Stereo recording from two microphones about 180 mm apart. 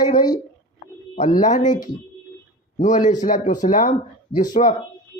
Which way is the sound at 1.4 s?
45° left (ahead or behind).